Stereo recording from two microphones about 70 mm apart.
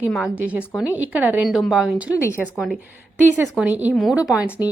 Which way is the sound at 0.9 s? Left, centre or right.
Right.